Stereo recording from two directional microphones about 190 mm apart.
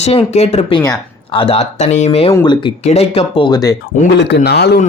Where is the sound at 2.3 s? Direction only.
25° left (ahead or behind).